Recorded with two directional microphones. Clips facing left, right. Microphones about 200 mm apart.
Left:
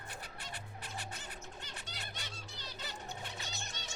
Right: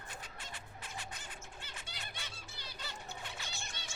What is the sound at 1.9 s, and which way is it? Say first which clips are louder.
Music: left 2 dB; 10° right (ahead or behind).